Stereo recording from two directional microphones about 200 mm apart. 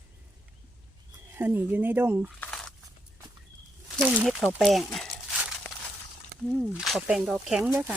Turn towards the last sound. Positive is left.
turn(degrees=-10)  # may be behind; listen again after turning